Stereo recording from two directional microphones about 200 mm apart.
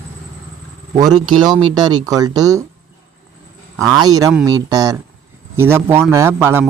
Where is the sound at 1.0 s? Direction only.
20° right (ahead or behind).